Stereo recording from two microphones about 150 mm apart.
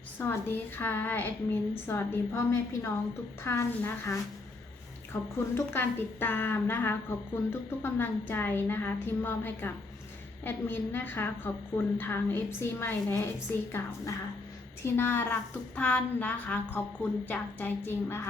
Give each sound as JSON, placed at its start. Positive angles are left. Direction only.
{"t": 0.2, "sound": "a woman's voice", "side_deg": 15}